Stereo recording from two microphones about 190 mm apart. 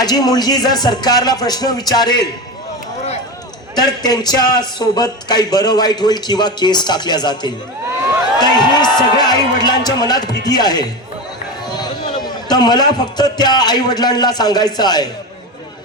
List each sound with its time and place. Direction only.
0.0 s a man's voice: 20° left (ahead or behind)
3.8 s a man's voice: 20° left (ahead or behind)